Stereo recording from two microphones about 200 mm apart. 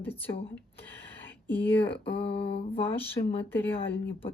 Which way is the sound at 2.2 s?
30° left (ahead or behind).